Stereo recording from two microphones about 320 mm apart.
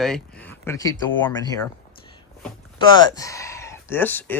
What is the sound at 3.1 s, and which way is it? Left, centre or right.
Speech, centre.